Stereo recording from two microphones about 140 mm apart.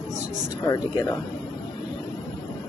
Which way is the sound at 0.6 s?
30° left (ahead or behind).